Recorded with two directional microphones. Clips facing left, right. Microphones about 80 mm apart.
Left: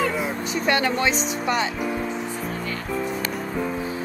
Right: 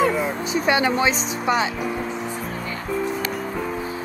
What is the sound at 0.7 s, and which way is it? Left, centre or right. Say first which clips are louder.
Speech: right 2 dB; centre.